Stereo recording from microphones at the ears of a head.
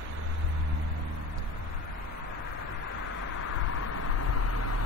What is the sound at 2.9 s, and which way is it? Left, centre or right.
Vehicle, left.